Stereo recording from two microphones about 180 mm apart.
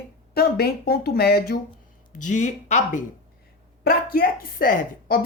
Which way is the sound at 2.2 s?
45° left (ahead or behind).